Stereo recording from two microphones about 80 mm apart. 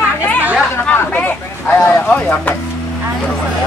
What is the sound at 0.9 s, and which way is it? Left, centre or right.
Speech, left.